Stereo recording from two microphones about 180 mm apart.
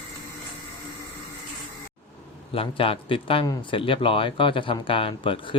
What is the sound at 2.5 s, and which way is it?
Speech, 30° left (ahead or behind).